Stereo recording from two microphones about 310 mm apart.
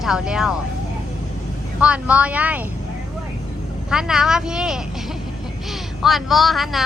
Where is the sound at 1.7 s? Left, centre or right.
Centre.